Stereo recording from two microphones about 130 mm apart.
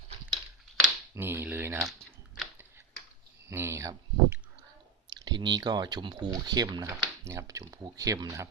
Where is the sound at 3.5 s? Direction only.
20° right (ahead or behind).